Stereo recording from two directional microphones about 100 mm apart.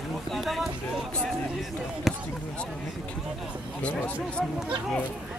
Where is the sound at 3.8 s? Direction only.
15° left (ahead or behind).